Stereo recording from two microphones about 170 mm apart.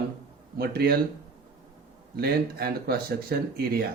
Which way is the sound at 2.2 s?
65° right (ahead or behind).